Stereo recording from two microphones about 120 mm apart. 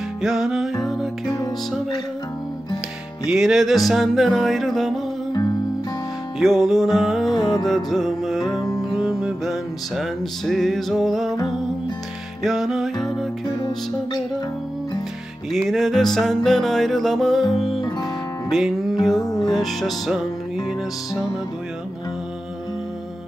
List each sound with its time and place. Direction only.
0.2 s music: 5° right (ahead or behind)
3.3 s music: 5° right (ahead or behind)
5.3 s music: 35° left (ahead or behind)
6.4 s music: centre (ahead or behind)
7.3 s music: 35° left (ahead or behind)
7.6 s music: centre (ahead or behind)
12.4 s music: centre (ahead or behind)
13.6 s music: 40° left (ahead or behind)
15.5 s music: centre (ahead or behind)
19.2 s music: 30° left (ahead or behind)
19.5 s music: centre (ahead or behind)